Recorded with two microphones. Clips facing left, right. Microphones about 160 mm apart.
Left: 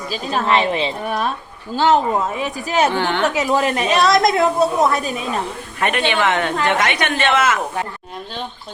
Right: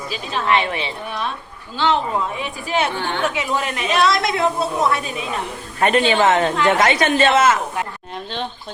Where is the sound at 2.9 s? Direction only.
80° left.